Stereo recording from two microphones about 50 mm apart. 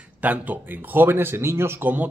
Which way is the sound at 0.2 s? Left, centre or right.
Right.